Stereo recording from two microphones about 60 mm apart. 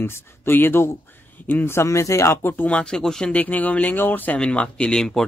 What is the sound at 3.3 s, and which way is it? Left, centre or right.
Speech, left.